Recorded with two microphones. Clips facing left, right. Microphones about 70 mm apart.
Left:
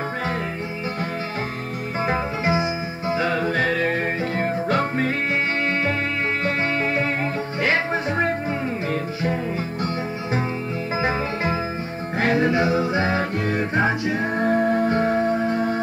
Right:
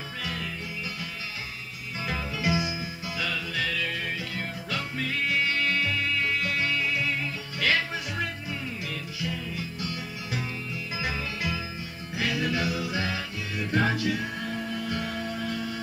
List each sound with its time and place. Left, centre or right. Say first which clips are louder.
2.0 s music: left 6 dB; left
6.4 s music: left 6 dB; left
11.0 s music: left 9 dB; left
13.7 s music: left 2 dB; left